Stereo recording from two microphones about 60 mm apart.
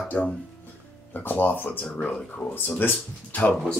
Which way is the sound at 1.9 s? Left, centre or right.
Centre.